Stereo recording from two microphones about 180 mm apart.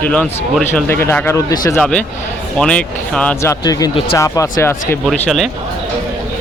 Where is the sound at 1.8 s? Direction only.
5° left (ahead or behind).